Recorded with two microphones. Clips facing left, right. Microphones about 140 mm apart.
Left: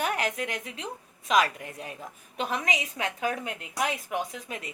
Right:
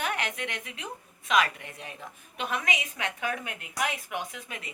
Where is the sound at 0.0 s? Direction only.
40° left (ahead or behind).